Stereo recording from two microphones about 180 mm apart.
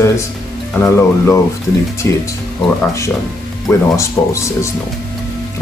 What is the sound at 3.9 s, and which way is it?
Speech, 15° left (ahead or behind).